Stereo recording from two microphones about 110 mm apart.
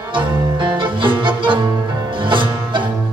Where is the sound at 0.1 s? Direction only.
50° right (ahead or behind).